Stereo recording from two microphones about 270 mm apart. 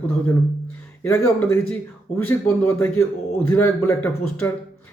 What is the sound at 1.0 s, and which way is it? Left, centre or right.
A man's voice, centre.